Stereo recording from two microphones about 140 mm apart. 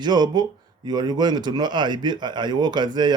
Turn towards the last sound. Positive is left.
turn(degrees=-30)  # may be behind; listen again after turning